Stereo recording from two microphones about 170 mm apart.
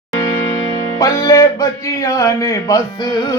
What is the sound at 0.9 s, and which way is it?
Speech, 20° left (ahead or behind).